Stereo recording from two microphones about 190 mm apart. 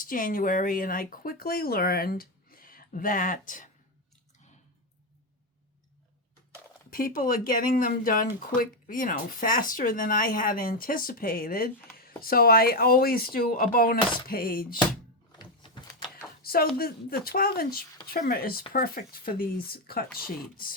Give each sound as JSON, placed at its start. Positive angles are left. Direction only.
{"t": 0.0, "sound": "speech", "side_deg": 45}
{"t": 6.9, "sound": "speech", "side_deg": 50}
{"t": 15.4, "sound": "a sound", "side_deg": 25}
{"t": 16.4, "sound": "speech", "side_deg": 50}